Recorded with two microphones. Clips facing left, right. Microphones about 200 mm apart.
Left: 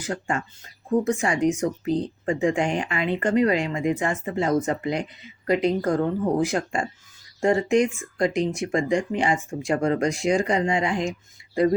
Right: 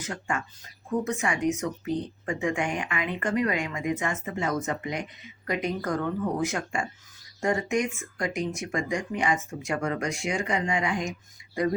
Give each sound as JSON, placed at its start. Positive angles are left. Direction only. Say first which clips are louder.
{"t": 0.0, "sound": "speech", "louder": "left 4 dB", "side_deg": 30}